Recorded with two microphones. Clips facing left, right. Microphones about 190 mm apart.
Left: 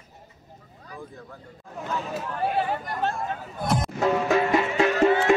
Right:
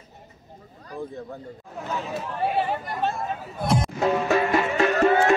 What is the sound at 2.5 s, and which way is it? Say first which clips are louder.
A man's voice: right 1 dB; centre (ahead or behind).